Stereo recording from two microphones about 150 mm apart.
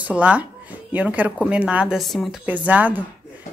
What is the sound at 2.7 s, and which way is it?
Speech, 10° right (ahead or behind).